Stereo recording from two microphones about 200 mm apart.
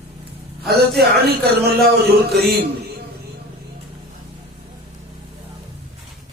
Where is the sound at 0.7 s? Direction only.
55° right (ahead or behind).